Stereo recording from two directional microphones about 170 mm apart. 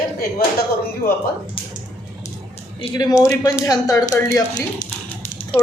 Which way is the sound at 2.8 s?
25° left (ahead or behind).